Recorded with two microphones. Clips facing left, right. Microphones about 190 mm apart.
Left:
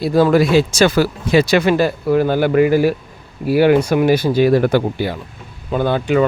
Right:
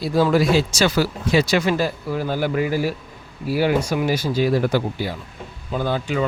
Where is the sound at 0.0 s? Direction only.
55° left (ahead or behind).